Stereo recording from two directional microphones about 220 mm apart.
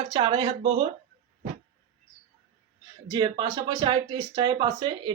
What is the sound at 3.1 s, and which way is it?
Speech, 20° right (ahead or behind).